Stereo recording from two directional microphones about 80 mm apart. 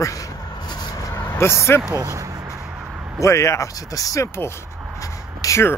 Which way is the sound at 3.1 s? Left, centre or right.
Left.